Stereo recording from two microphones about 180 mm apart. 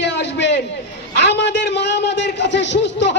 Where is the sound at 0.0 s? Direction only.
75° left (ahead or behind).